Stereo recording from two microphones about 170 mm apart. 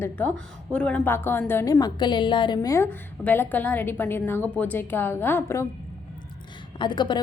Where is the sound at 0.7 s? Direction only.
5° left (ahead or behind).